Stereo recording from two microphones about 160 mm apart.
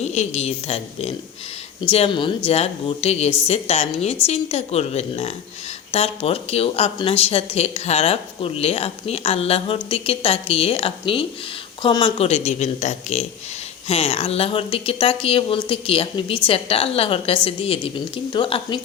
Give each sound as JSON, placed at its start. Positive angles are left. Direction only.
{"t": 0.0, "sound": "speech", "side_deg": 45}